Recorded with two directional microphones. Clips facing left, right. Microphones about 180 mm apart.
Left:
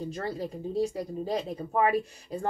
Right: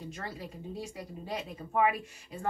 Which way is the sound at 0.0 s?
35° left (ahead or behind).